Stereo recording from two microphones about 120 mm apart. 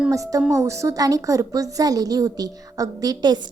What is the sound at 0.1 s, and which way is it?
A woman's voice, 30° right (ahead or behind).